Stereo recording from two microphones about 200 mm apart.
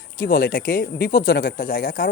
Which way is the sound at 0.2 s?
45° left (ahead or behind).